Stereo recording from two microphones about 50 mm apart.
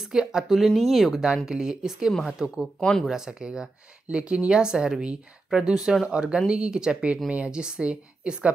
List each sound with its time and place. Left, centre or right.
0.0 s speech: centre
1.4 s speech: centre
2.8 s speech: centre
3.1 s speech: centre